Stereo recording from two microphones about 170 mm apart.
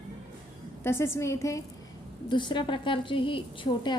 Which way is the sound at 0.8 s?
15° left (ahead or behind).